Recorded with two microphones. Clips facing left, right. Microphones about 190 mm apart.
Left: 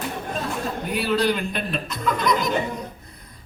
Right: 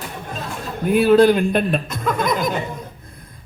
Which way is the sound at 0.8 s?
50° right (ahead or behind).